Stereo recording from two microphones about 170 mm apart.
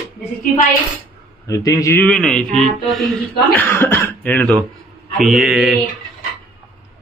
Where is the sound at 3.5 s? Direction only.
10° left (ahead or behind).